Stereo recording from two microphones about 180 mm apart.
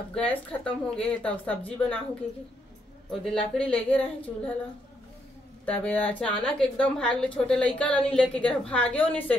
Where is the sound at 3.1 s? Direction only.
5° left (ahead or behind).